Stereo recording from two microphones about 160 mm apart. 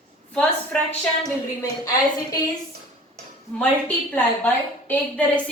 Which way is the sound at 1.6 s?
20° left (ahead or behind).